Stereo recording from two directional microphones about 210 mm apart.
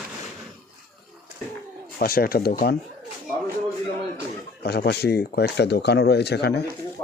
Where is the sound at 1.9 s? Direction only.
45° left (ahead or behind).